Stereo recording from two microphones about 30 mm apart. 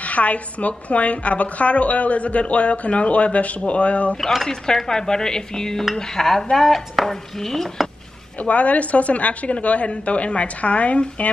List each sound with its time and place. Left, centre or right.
0.0 s a woman's voice: left
4.8 s dishes: left
5.9 s speech: centre
6.5 s chopping: centre
7.1 s speech: centre
8.4 s a woman's voice: left